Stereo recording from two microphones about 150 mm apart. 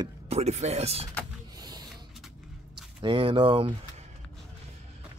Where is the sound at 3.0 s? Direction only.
35° right (ahead or behind).